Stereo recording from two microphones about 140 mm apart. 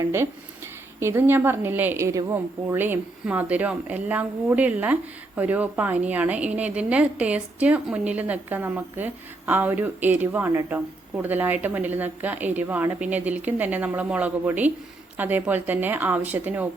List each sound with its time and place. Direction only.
0.0 s a woman's voice: 15° right (ahead or behind)